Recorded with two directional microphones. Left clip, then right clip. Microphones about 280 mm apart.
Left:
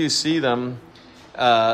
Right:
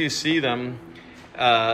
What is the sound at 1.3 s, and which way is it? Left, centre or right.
Speech, centre.